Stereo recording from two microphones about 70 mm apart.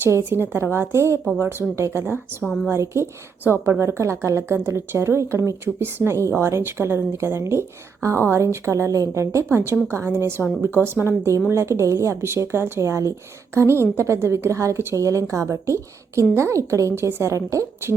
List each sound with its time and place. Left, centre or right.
0.3 s a woman's voice: right